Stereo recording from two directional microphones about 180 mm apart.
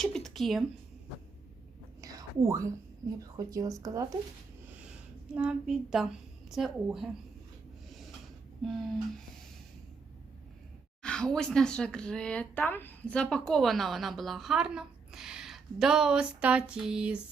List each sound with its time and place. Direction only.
0.0 s speech: centre (ahead or behind)
2.0 s whispering: 20° right (ahead or behind)
3.3 s speech: 20° right (ahead or behind)
5.3 s speech: 5° right (ahead or behind)
8.6 s speech: centre (ahead or behind)
11.0 s speech: 5° left (ahead or behind)